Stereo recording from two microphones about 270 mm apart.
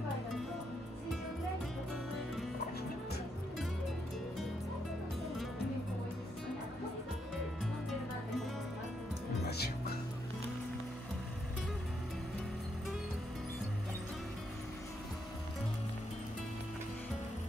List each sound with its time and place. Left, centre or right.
9.5 s music: left